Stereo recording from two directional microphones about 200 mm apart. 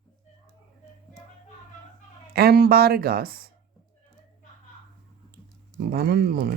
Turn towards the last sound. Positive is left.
turn(degrees=-50)  # may be behind; listen again after turning